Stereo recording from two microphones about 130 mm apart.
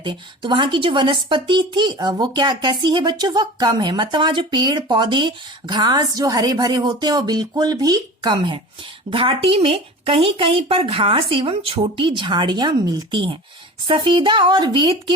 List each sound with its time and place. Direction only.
0.0 s a woman's voice: 40° right (ahead or behind)